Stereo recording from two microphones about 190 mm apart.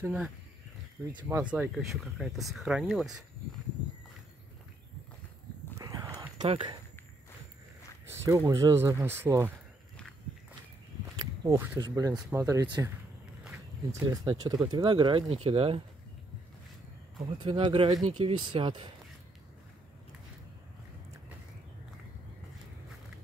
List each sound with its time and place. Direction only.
0.0 s speech: 5° right (ahead or behind)
1.3 s speech: 10° right (ahead or behind)
5.8 s a sound: 15° right (ahead or behind)
6.4 s speech: 30° right (ahead or behind)
8.1 s a sound: 15° right (ahead or behind)
8.5 s speech: 20° right (ahead or behind)
11.1 s a sound: 15° right (ahead or behind)
11.8 s speech: 20° right (ahead or behind)
13.9 s speech: 20° right (ahead or behind)
17.4 s speech: 25° right (ahead or behind)